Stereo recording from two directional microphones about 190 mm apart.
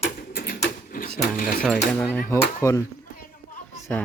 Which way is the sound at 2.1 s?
15° left (ahead or behind).